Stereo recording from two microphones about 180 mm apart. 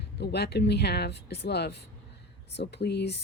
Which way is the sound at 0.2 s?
65° left (ahead or behind).